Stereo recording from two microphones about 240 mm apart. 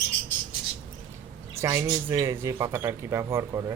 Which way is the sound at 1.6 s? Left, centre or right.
Centre.